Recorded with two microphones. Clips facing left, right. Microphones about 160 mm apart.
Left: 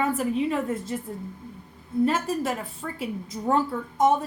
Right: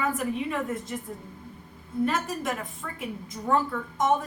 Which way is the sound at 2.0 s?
30° left (ahead or behind).